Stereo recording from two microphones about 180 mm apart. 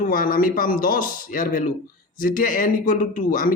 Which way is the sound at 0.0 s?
50° left (ahead or behind).